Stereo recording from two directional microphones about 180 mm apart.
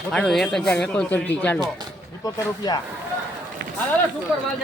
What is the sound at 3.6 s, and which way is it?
Run, 70° right (ahead or behind).